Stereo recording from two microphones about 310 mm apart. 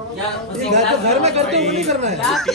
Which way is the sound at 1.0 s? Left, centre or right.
Centre.